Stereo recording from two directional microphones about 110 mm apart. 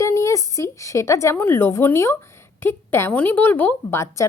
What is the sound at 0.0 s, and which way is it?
A woman's voice, 30° left (ahead or behind).